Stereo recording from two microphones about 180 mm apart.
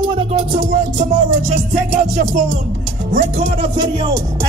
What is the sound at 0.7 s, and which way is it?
Music, 45° right (ahead or behind).